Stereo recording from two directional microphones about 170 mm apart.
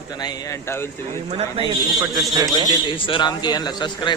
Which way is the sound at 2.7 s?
30° left (ahead or behind).